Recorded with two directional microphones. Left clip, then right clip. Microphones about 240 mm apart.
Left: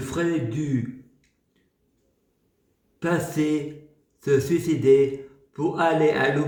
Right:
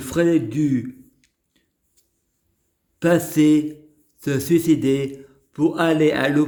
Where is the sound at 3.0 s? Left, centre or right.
Right.